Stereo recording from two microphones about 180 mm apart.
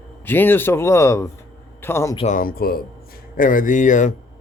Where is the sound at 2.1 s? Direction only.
45° left (ahead or behind).